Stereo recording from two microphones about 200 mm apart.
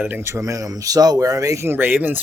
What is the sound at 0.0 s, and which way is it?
Speech, 10° right (ahead or behind).